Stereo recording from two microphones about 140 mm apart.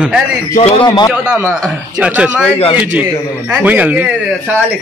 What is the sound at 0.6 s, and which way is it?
Speech, 40° left (ahead or behind).